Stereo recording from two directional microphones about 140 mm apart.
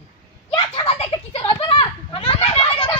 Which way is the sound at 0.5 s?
40° left (ahead or behind).